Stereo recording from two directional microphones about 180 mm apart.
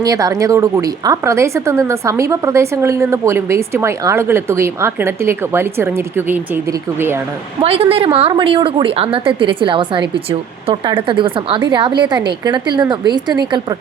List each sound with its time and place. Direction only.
0.0 s a woman's voice: 20° right (ahead or behind)
7.6 s a woman's voice: 30° right (ahead or behind)